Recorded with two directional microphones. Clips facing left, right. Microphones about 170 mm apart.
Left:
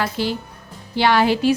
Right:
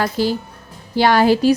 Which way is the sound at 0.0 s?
40° right (ahead or behind).